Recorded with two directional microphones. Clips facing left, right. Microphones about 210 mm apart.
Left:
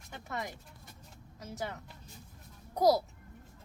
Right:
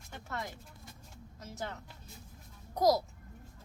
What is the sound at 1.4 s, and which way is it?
A woman's voice, 10° left (ahead or behind).